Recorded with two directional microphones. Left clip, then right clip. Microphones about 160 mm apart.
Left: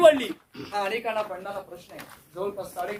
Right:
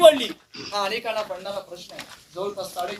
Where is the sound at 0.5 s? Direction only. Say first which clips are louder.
Right 2 dB; 20° left (ahead or behind).